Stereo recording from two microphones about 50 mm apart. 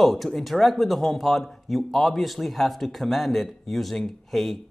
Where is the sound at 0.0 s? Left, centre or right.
Centre.